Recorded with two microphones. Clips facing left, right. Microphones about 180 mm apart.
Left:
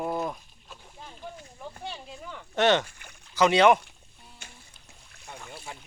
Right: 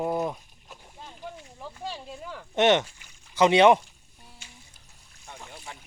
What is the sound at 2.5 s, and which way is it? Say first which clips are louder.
Speech: right 2 dB; 25° right (ahead or behind).